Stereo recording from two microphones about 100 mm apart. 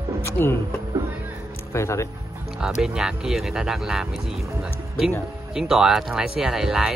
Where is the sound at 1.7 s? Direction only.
30° left (ahead or behind).